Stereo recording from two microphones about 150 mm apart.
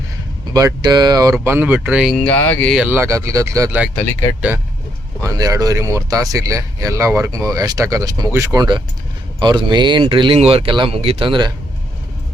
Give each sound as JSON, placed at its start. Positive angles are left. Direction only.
{"t": 0.5, "sound": "speech", "side_deg": -25}
{"t": 2.1, "sound": "speech", "side_deg": 10}
{"t": 2.8, "sound": "speech", "side_deg": -15}
{"t": 3.9, "sound": "speech", "side_deg": 15}
{"t": 5.2, "sound": "speech", "side_deg": -25}